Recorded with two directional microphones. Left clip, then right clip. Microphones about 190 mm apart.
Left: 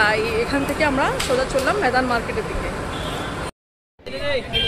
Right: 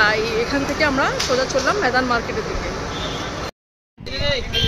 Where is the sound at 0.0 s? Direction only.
Centre (ahead or behind).